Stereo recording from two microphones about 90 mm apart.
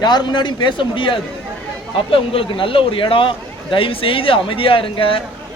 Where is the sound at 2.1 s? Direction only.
90° left.